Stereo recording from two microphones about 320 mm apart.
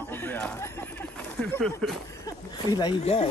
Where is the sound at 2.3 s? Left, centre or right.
Centre.